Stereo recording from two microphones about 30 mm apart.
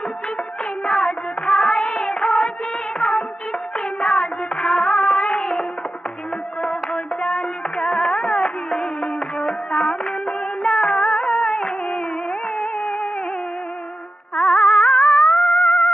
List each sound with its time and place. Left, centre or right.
0.8 s music of bollywood: centre
3.0 s music: left
3.7 s music of bollywood: left
6.6 s music: left
12.7 s a sound: left
14.3 s music: left